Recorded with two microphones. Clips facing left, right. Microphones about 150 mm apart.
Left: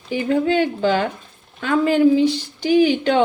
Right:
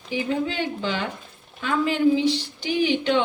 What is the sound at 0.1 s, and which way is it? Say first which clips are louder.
A woman's voice: left 7 dB; 50° left (ahead or behind).